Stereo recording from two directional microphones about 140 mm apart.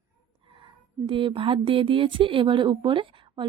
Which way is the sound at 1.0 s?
35° right (ahead or behind).